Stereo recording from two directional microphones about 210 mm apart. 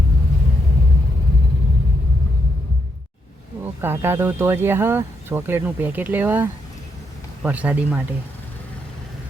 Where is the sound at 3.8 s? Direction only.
10° right (ahead or behind).